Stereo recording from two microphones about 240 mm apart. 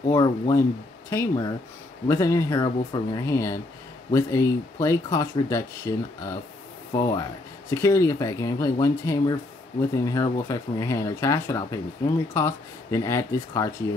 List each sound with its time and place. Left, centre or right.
0.1 s speech: centre